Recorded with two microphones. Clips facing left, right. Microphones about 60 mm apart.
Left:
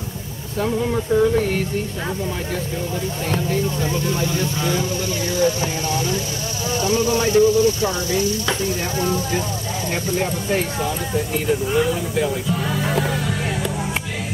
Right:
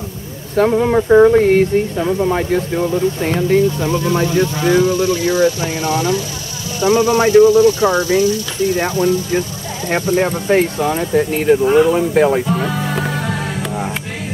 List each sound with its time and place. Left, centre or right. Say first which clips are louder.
0.6 s speech: right 8 dB; right
1.4 s speech: right 10 dB; right
3.2 s speech: right 7 dB; right